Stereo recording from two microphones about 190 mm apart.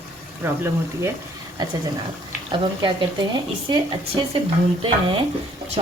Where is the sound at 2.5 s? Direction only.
25° right (ahead or behind).